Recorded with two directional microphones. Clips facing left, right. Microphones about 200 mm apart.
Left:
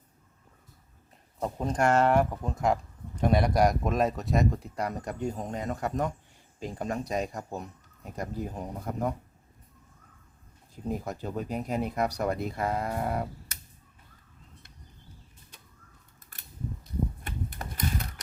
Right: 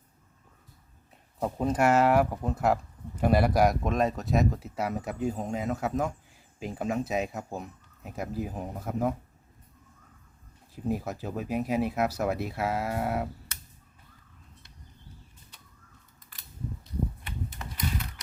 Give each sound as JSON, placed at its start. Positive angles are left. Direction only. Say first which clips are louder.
{"t": 1.4, "sound": "speech", "louder": "right 2 dB", "side_deg": -5}
{"t": 10.8, "sound": "speech", "louder": "right 2 dB", "side_deg": -5}
{"t": 17.2, "sound": "typewriter", "louder": "left 1 dB", "side_deg": 50}